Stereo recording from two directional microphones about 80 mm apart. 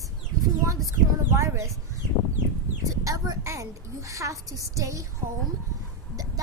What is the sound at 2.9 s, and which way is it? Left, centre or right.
A child's voice, right.